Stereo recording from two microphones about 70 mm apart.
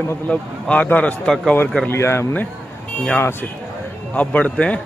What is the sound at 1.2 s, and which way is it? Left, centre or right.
Speech, centre.